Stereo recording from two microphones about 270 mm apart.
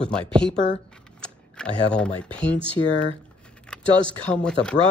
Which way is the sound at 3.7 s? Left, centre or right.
Centre.